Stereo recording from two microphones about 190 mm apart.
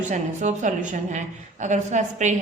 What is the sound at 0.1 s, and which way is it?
A woman's voice, 40° right (ahead or behind).